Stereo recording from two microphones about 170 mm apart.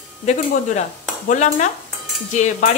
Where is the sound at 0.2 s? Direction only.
40° left (ahead or behind).